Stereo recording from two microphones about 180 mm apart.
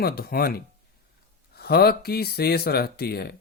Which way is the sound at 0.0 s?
55° left (ahead or behind).